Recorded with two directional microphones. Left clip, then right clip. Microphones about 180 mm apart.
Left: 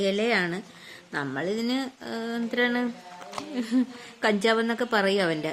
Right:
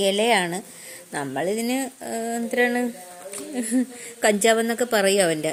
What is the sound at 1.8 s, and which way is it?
A woman's voice, 15° right (ahead or behind).